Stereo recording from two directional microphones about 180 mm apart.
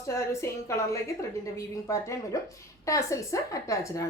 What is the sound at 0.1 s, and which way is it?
A woman's voice, 15° left (ahead or behind).